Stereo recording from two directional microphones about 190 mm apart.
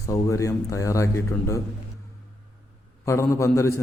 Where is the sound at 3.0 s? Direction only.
15° left (ahead or behind).